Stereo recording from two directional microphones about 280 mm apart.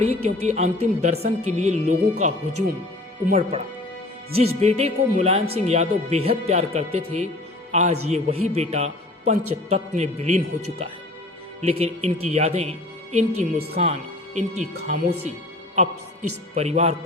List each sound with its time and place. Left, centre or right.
0.0 s speech: right
13.4 s a woman's voice: right
16.6 s speech: right